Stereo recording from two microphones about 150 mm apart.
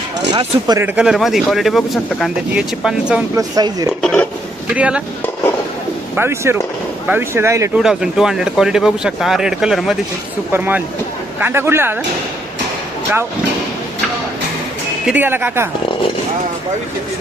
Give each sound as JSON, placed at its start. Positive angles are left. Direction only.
{"t": 0.3, "sound": "speech", "side_deg": -30}
{"t": 0.8, "sound": "speech", "side_deg": -10}
{"t": 3.3, "sound": "speech", "side_deg": -25}
{"t": 4.0, "sound": "a sound", "side_deg": 5}
{"t": 4.7, "sound": "speech", "side_deg": -10}
{"t": 6.1, "sound": "speech", "side_deg": -15}
{"t": 7.8, "sound": "speech", "side_deg": -5}
{"t": 15.0, "sound": "speech", "side_deg": -10}